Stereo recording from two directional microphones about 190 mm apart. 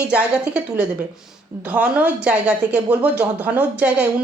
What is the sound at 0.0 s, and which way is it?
A woman's voice, 5° right (ahead or behind).